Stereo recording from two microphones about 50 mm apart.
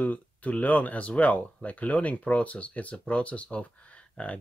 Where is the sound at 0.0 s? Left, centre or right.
Left.